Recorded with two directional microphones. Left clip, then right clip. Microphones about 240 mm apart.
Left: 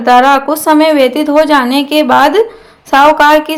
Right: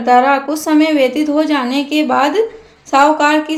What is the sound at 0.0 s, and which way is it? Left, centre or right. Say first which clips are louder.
A woman's voice: left 4 dB; centre.